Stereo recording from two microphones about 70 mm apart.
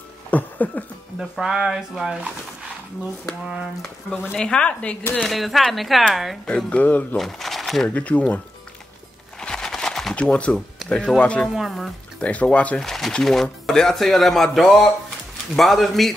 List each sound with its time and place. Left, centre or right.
0.3 s a sound: left
1.3 s speech: centre
4.3 s speech: centre
5.2 s speech: centre
6.4 s speech: centre
7.2 s speech: centre
7.9 s speech: centre
9.4 s a sound: centre
10.1 s speech: centre
10.8 s music: centre
11.1 s speech: centre
11.4 s speech: centre
12.2 s speech: centre
12.8 s speech: centre